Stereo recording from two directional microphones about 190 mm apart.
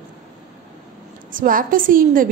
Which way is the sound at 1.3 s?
45° right (ahead or behind).